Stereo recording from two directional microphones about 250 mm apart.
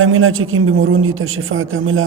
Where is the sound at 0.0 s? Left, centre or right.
Right.